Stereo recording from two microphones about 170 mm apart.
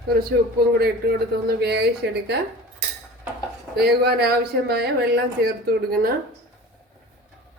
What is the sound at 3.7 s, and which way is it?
Speech, 70° right (ahead or behind).